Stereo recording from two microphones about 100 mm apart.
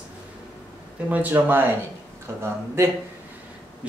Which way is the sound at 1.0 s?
15° right (ahead or behind).